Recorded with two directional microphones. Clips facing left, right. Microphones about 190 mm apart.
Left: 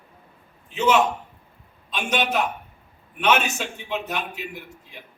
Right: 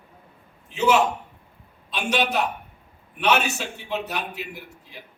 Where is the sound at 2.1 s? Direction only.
35° right (ahead or behind).